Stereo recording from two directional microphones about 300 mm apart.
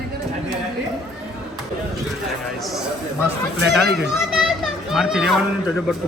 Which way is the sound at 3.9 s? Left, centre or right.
Centre.